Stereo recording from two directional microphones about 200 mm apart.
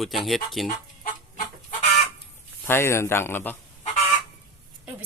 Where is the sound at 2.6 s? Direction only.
10° left (ahead or behind).